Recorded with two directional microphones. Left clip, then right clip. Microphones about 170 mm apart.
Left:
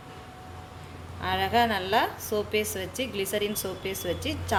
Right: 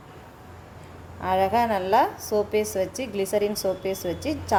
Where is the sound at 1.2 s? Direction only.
45° right (ahead or behind).